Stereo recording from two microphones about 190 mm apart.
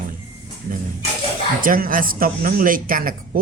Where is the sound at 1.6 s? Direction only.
45° right (ahead or behind).